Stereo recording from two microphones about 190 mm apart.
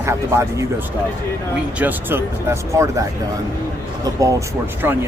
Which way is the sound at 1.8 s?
10° right (ahead or behind).